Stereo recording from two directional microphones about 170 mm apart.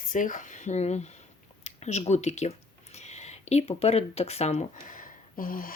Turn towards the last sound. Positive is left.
turn(degrees=55)  # may be behind; listen again after turning